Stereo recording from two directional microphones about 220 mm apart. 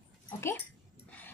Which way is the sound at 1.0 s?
5° left (ahead or behind).